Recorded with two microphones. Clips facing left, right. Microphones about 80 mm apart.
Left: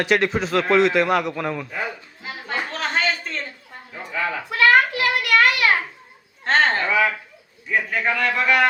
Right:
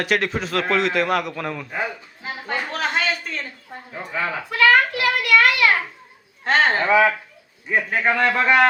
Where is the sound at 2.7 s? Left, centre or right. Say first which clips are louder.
Right 1 dB; centre.